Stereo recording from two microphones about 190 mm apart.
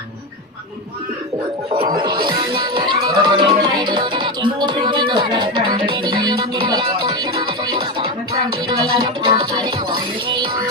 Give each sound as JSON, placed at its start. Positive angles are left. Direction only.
{"t": 1.7, "sound": "music", "side_deg": -25}